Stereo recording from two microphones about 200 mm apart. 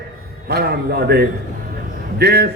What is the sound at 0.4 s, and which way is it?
A man's voice, 55° right (ahead or behind).